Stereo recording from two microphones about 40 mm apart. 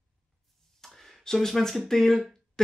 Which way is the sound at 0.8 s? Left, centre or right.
Centre.